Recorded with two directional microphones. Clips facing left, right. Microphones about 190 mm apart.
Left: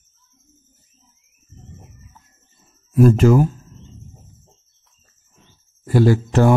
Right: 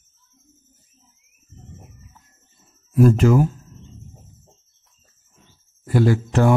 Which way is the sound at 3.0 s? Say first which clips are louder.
Left 2 dB; 40° left (ahead or behind).